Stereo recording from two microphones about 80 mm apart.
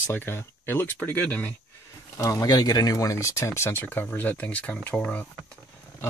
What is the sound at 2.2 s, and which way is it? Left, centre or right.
Speech, left.